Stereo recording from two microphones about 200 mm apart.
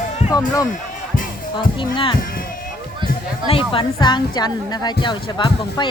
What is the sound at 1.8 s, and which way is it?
Speech, 25° left (ahead or behind).